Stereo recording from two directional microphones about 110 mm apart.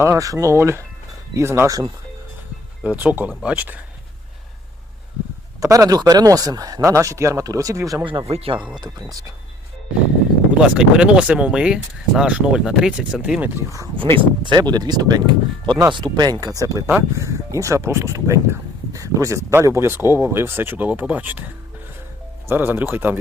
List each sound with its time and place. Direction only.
0.0 s speech: 30° right (ahead or behind)
2.8 s speech: 15° right (ahead or behind)
5.5 s speech: 30° right (ahead or behind)
8.3 s speech: 65° right (ahead or behind)
10.6 s speech: 10° right (ahead or behind)
13.4 s speech: 25° right (ahead or behind)
13.9 s speech: 50° right (ahead or behind); by 21.4 s 15° right (ahead or behind)
22.4 s speech: 15° right (ahead or behind)